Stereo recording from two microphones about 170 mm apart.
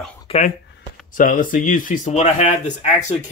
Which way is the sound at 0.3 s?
35° left (ahead or behind).